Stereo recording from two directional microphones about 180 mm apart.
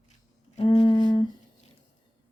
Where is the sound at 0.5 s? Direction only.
30° left (ahead or behind).